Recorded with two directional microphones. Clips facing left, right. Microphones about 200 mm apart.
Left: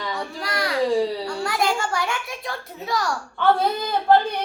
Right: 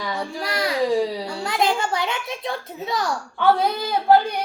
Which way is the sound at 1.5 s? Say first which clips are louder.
Right 3 dB; 20° right (ahead or behind).